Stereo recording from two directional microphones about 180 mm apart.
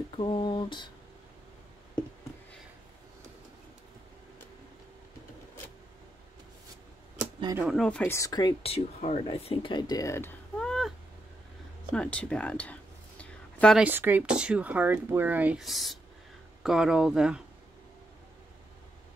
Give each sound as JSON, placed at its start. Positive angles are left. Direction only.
{"t": 0.2, "sound": "speech", "side_deg": 25}
{"t": 7.5, "sound": "speech", "side_deg": 0}
{"t": 8.7, "sound": "speech", "side_deg": 35}
{"t": 10.6, "sound": "a sound", "side_deg": 0}
{"t": 11.9, "sound": "speech", "side_deg": 5}
{"t": 13.2, "sound": "a sound", "side_deg": 5}
{"t": 13.7, "sound": "speech", "side_deg": -10}